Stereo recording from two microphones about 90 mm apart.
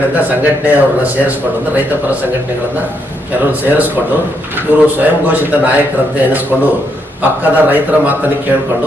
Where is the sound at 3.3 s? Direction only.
20° right (ahead or behind).